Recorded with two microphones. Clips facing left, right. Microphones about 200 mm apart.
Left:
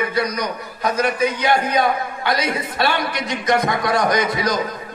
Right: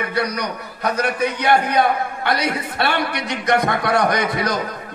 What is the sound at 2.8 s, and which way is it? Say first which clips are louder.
A man's voice: even; 60° right (ahead or behind).